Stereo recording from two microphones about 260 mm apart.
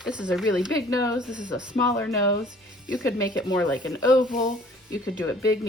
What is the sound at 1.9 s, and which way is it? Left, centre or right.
Speech, centre.